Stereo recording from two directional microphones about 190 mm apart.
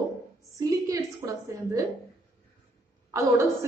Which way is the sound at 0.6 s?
15° right (ahead or behind).